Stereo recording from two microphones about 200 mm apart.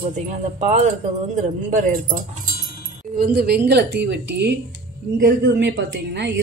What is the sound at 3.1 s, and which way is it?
Speech, 50° right (ahead or behind).